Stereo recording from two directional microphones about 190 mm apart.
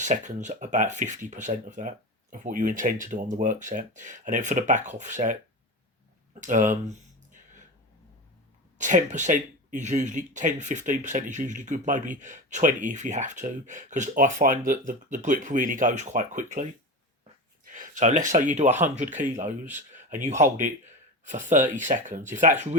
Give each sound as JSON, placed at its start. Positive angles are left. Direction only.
{"t": 0.0, "sound": "speech", "side_deg": -40}
{"t": 6.4, "sound": "speech", "side_deg": -40}
{"t": 8.8, "sound": "speech", "side_deg": -40}
{"t": 17.7, "sound": "speech", "side_deg": -40}
{"t": 19.4, "sound": "speech", "side_deg": -10}
{"t": 20.1, "sound": "speech", "side_deg": -40}